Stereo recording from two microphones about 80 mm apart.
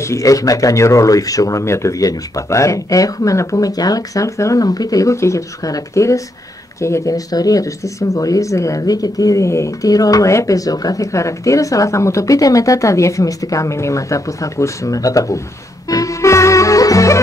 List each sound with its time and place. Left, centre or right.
0.0 s speech: left
15.9 s music: left